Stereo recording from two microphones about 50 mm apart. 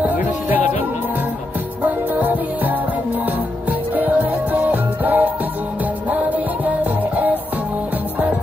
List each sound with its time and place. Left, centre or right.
0.0 s music: right
1.8 s music: right
3.9 s music: right